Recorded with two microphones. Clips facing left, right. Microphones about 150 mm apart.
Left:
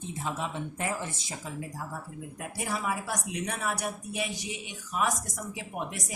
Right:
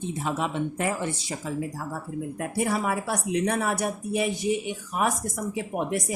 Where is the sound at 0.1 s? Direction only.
75° right (ahead or behind).